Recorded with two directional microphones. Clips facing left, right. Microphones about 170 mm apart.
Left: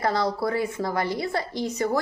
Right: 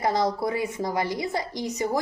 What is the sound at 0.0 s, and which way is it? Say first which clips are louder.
A woman's voice: even; 15° right (ahead or behind).